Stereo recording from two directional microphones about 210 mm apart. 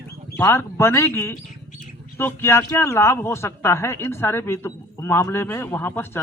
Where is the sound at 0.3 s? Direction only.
10° left (ahead or behind).